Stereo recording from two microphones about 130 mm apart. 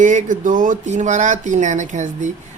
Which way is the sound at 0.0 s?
70° right (ahead or behind).